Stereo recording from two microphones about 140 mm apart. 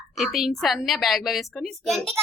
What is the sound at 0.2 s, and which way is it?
A woman's voice, centre (ahead or behind).